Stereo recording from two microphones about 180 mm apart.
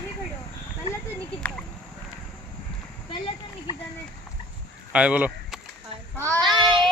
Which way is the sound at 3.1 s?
30° left (ahead or behind).